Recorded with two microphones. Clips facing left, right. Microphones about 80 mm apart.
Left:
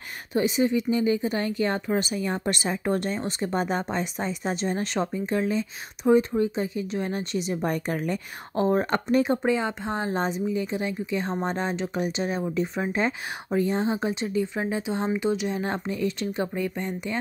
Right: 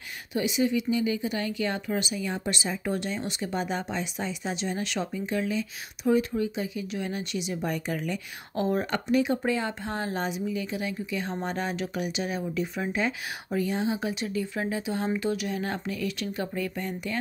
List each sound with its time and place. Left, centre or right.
0.3 s speech: left
9.4 s speech: left